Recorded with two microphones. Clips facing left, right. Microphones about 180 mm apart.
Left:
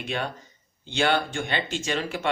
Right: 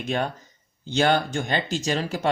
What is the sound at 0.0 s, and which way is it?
Speech, 40° right (ahead or behind).